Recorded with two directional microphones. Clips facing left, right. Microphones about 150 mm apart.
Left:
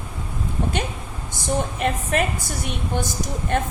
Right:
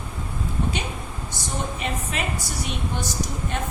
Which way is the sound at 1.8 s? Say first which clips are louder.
Left 6 dB; 50° left (ahead or behind).